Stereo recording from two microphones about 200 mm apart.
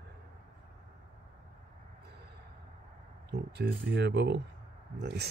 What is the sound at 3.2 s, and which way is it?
Speech, 55° right (ahead or behind).